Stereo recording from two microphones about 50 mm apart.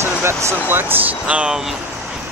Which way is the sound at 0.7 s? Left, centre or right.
Right.